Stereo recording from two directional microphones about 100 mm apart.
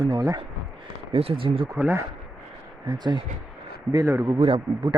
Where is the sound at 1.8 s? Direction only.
20° right (ahead or behind).